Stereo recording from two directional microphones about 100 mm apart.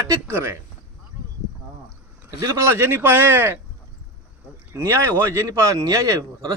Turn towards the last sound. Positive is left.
turn(degrees=-35)  # may be behind; listen again after turning